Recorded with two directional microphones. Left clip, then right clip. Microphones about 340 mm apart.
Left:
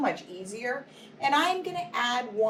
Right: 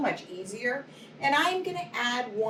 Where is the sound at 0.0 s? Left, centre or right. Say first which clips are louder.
Left 1 dB; centre.